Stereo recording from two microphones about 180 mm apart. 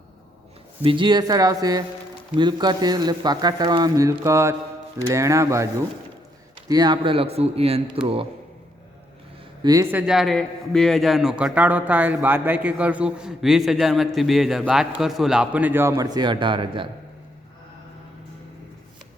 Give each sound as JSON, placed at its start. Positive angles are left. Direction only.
{"t": 0.8, "sound": "speech", "side_deg": -30}
{"t": 6.7, "sound": "speech", "side_deg": -20}
{"t": 9.9, "sound": "a man's voice", "side_deg": 0}